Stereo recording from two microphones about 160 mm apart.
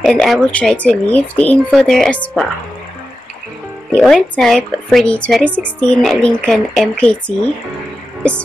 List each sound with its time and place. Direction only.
0.0 s speech: centre (ahead or behind)
3.9 s speech: centre (ahead or behind)